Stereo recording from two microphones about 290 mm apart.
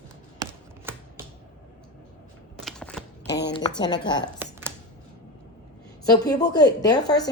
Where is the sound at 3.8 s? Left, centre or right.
Centre.